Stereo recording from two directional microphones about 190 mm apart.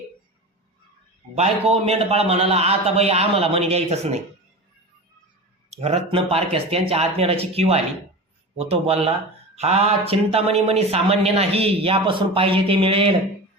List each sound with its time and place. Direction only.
1.4 s speech: 30° right (ahead or behind)
5.7 s speech: 30° right (ahead or behind)